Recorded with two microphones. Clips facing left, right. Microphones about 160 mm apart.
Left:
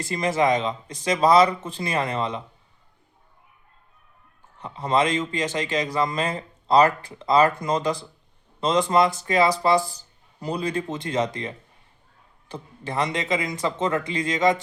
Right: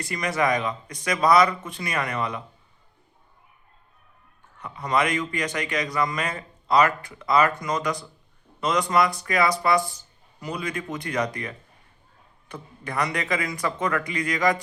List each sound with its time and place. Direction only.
0.0 s speech: 25° left (ahead or behind)
4.5 s speech: 30° left (ahead or behind)